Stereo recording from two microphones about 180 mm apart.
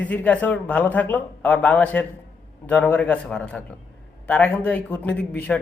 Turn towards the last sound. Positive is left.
turn(degrees=5)  # may be behind; listen again after turning